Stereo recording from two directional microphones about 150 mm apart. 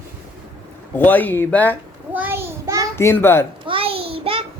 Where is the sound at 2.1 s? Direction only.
15° right (ahead or behind).